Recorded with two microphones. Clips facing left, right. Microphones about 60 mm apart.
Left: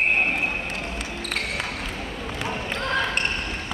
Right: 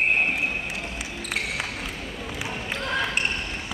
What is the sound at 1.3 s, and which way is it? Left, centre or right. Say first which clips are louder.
Basketball bounce: even; centre.